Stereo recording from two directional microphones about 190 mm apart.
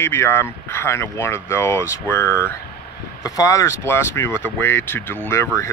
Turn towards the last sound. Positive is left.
turn(degrees=10)  # may be behind; listen again after turning